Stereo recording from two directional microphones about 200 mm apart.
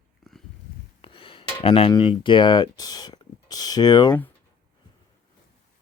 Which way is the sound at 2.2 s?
25° left (ahead or behind).